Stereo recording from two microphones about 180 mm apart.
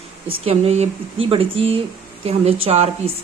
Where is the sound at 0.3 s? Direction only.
35° right (ahead or behind).